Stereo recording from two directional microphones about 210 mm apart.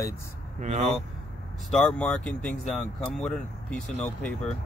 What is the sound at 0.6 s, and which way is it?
Speech, 35° right (ahead or behind).